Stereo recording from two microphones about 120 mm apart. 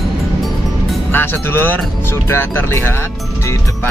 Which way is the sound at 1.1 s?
20° left (ahead or behind).